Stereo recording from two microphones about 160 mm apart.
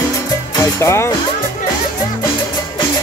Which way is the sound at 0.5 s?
15° left (ahead or behind).